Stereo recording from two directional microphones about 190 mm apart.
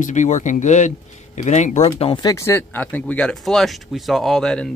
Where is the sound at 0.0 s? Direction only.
40° left (ahead or behind).